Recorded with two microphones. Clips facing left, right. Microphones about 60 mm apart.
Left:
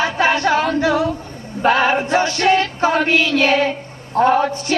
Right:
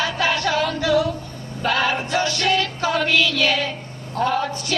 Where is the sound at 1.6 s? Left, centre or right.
Left.